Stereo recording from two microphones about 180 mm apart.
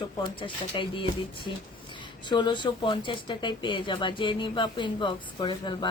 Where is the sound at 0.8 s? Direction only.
25° left (ahead or behind).